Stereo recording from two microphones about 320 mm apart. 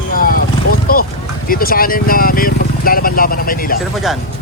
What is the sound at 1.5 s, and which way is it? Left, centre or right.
Speech, left.